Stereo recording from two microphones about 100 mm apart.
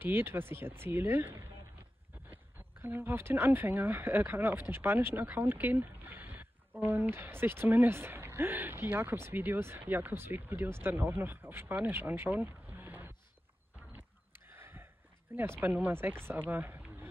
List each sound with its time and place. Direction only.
0.0 s speech: 20° right (ahead or behind)
14.5 s a sound: 25° right (ahead or behind)
15.3 s speech: 20° right (ahead or behind)